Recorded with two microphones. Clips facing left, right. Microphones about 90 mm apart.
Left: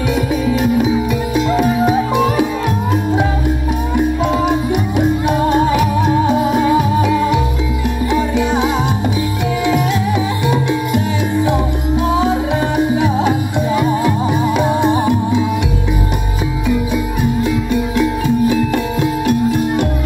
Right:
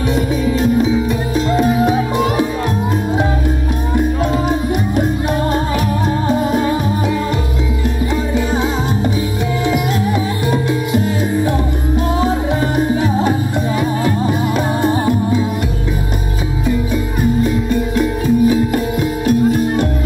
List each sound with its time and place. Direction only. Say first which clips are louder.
0.1 s music: left 1 dB; 35° right (ahead or behind)
1.6 s music: right 1 dB; centre (ahead or behind)
3.9 s music: left 1 dB; centre (ahead or behind)
12.7 s music: left 2 dB; 5° left (ahead or behind)
16.6 s music: even; 40° right (ahead or behind)